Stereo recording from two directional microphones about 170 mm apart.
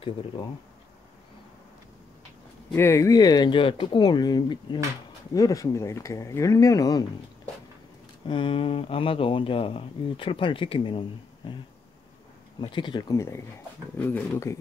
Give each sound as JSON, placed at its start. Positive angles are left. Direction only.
{"t": 2.7, "sound": "speech", "side_deg": 15}
{"t": 8.3, "sound": "speech", "side_deg": 30}
{"t": 12.5, "sound": "speech", "side_deg": 25}
{"t": 13.9, "sound": "speech", "side_deg": 10}